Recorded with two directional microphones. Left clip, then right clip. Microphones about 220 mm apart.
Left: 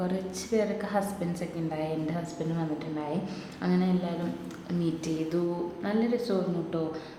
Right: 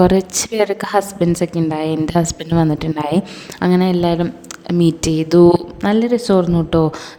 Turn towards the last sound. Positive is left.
turn(degrees=-45)  # may be behind; listen again after turning